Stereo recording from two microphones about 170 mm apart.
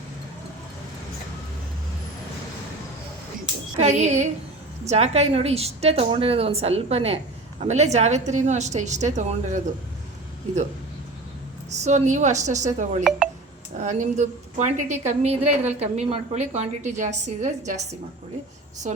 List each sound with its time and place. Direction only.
3.8 s a woman's voice: 40° right (ahead or behind)
11.7 s a woman's voice: 40° right (ahead or behind)